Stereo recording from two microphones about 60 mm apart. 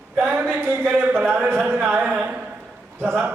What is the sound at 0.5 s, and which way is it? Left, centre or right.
Speech, right.